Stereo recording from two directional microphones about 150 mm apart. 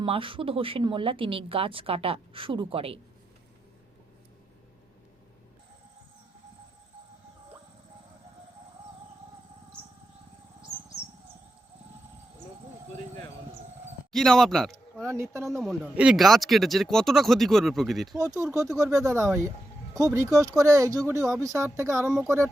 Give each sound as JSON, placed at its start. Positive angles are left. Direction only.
{"t": 0.0, "sound": "speech", "side_deg": -35}
{"t": 14.1, "sound": "speech", "side_deg": 5}
{"t": 15.0, "sound": "speech", "side_deg": -20}
{"t": 15.6, "sound": "speech", "side_deg": -5}
{"t": 18.2, "sound": "speech", "side_deg": -20}